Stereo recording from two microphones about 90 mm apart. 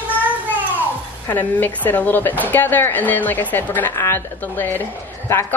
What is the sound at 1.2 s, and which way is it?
Speech, 20° left (ahead or behind).